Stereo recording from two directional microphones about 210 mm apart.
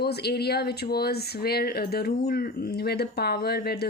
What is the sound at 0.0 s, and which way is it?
Speech, 50° left (ahead or behind).